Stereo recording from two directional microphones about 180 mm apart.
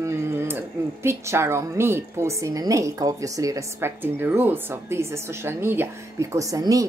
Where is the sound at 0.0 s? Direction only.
15° right (ahead or behind).